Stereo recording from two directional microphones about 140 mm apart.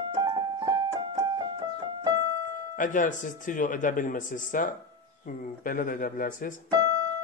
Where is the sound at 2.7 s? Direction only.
70° left (ahead or behind).